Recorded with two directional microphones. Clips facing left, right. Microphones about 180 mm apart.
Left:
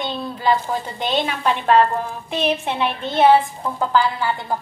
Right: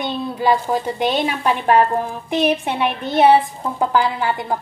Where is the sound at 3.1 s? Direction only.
15° right (ahead or behind).